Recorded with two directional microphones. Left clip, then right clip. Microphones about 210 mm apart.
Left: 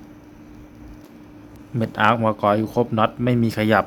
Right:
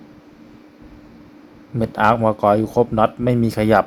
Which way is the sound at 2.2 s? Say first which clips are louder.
Right 3 dB; 5° right (ahead or behind).